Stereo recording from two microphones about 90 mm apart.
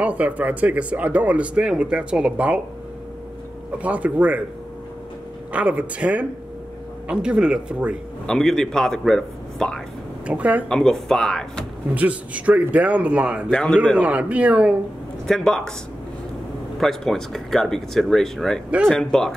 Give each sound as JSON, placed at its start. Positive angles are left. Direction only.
{"t": 0.0, "sound": "speech", "side_deg": -15}
{"t": 3.7, "sound": "speech", "side_deg": -15}
{"t": 5.5, "sound": "speech", "side_deg": -15}
{"t": 8.3, "sound": "a man's voice", "side_deg": 5}
{"t": 10.2, "sound": "speech", "side_deg": -15}
{"t": 10.7, "sound": "a man's voice", "side_deg": 5}
{"t": 11.9, "sound": "speech", "side_deg": -15}
{"t": 13.5, "sound": "a man's voice", "side_deg": 10}
{"t": 13.9, "sound": "speech", "side_deg": -15}
{"t": 15.2, "sound": "a man's voice", "side_deg": 5}
{"t": 16.8, "sound": "a man's voice", "side_deg": 5}